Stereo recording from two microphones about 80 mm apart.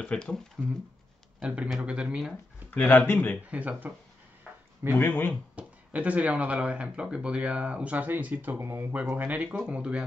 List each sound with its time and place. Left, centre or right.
0.0 s speech: centre
1.4 s speech: centre
2.7 s speech: left
3.4 s speech: centre
4.5 s a sound: centre
4.9 s speech: left
5.6 s speech: centre